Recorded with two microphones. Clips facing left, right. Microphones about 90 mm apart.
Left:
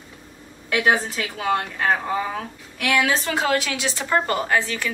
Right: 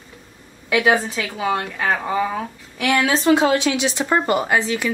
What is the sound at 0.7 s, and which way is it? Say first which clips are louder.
A woman's voice: right 3 dB; 10° right (ahead or behind).